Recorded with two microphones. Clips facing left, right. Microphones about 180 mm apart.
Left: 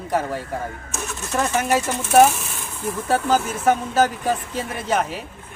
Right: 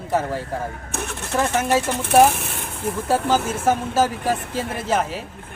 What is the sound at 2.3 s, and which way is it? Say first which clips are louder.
Speech: right 2 dB; 60° right (ahead or behind).